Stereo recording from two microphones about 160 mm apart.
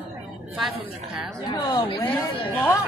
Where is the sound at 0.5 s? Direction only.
5° right (ahead or behind).